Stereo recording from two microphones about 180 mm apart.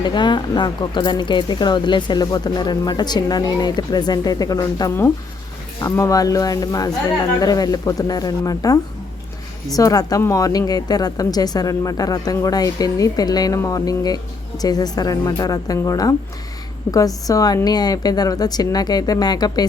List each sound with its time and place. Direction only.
0.0 s speech: 25° left (ahead or behind)